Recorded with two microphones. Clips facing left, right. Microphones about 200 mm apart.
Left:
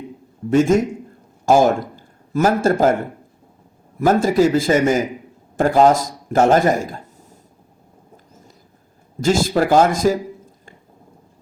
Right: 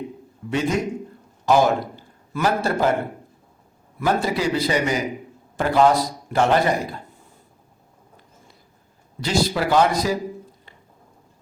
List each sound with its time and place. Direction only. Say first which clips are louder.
0.5 s a man's voice: left 8 dB; 45° left (ahead or behind)
4.0 s speech: left 7 dB; 45° left (ahead or behind)
9.2 s speech: left 5 dB; 50° left (ahead or behind)